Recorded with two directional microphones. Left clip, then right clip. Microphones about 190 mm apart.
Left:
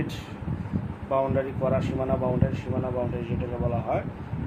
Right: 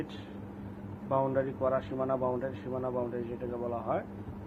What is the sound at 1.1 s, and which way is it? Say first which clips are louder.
Speech: left 4 dB; 15° left (ahead or behind).